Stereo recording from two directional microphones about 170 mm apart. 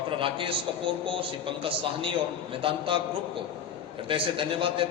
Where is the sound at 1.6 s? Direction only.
30° right (ahead or behind).